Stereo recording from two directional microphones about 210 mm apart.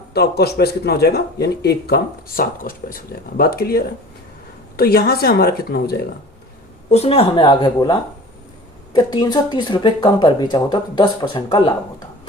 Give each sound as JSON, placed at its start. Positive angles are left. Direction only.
{"t": 0.1, "sound": "speech", "side_deg": 50}
{"t": 6.9, "sound": "speech", "side_deg": 30}